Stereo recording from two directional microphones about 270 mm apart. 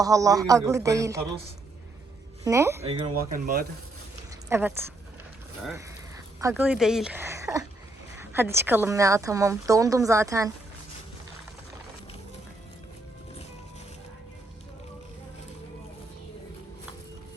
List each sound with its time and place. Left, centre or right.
0.0 s a woman's voice: centre
2.4 s speech: centre
2.8 s speech: right
4.4 s speech: centre
6.4 s a woman's voice: centre